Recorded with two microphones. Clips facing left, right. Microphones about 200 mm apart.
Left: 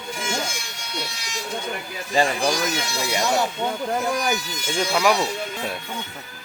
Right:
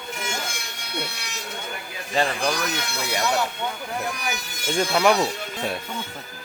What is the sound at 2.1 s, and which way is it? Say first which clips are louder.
Speech: left 3 dB; 10° left (ahead or behind).